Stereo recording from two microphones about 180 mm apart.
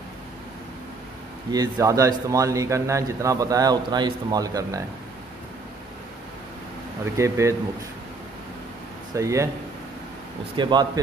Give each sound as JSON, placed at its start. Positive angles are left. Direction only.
{"t": 1.5, "sound": "a man's voice", "side_deg": -20}
{"t": 7.2, "sound": "speech", "side_deg": -15}
{"t": 9.1, "sound": "speech", "side_deg": -15}
{"t": 10.5, "sound": "a man's voice", "side_deg": -25}